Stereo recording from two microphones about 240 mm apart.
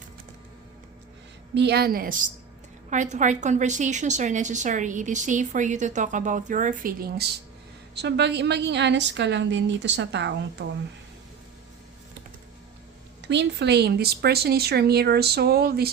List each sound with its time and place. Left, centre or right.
1.5 s a woman's voice: right
13.2 s a woman's voice: right